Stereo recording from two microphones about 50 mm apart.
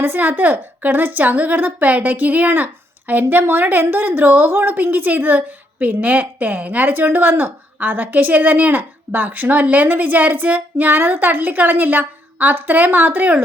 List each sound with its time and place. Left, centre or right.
0.0 s a woman's voice: right